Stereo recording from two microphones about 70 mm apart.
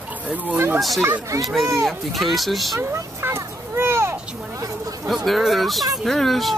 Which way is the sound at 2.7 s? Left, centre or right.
Right.